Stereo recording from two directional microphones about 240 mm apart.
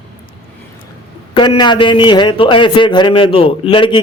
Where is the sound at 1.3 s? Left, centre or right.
Centre.